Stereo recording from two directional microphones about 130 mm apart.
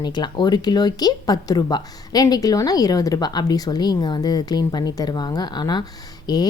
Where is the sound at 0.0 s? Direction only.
35° left (ahead or behind).